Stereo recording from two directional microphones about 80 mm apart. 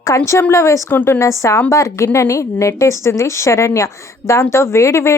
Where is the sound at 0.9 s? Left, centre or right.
Left.